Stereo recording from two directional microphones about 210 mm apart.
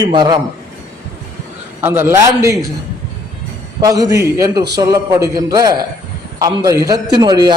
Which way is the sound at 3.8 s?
15° right (ahead or behind).